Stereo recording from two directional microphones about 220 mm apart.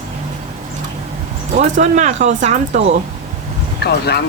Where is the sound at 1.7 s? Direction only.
35° right (ahead or behind).